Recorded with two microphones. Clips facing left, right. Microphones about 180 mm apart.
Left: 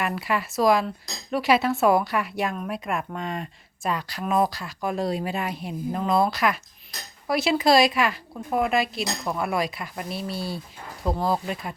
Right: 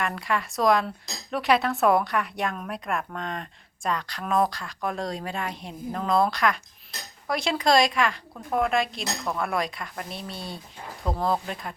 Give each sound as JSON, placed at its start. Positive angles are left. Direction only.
{"t": 0.0, "sound": "cutlery", "side_deg": 5}